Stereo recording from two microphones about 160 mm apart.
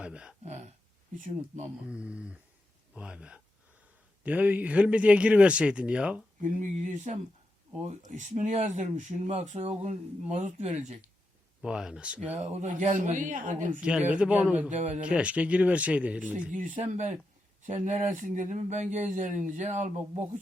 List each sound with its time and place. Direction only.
0.0 s speech: 5° right (ahead or behind)
0.4 s speech: 45° right (ahead or behind)
1.9 s speech: 5° right (ahead or behind)
6.4 s speech: 50° right (ahead or behind)
11.6 s speech: 5° right (ahead or behind)
12.4 s speech: 50° right (ahead or behind)
14.1 s speech: 5° right (ahead or behind)
14.7 s speech: 50° right (ahead or behind)
15.0 s speech: 10° right (ahead or behind)
16.6 s speech: 50° right (ahead or behind)